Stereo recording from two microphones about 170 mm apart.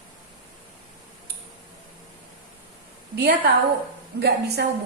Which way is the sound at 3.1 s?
70° right (ahead or behind).